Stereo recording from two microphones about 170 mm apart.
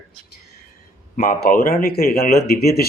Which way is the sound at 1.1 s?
60° left (ahead or behind).